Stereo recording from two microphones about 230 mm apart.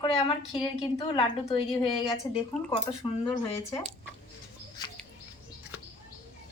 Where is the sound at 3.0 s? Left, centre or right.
Centre.